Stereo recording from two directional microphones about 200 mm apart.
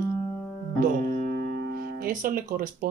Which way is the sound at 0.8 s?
40° right (ahead or behind).